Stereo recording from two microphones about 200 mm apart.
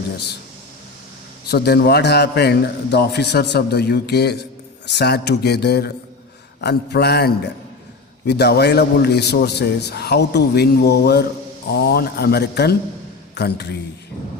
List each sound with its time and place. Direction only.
1.5 s a man's voice: 55° left (ahead or behind)